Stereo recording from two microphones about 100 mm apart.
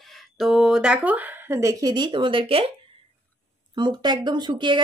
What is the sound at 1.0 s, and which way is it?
Speech, 15° right (ahead or behind).